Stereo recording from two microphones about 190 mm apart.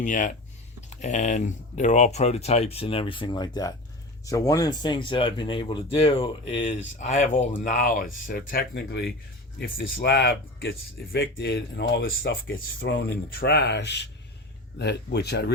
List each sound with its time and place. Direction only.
0.0 s speech: 45° left (ahead or behind)
12.9 s speech: 70° left (ahead or behind)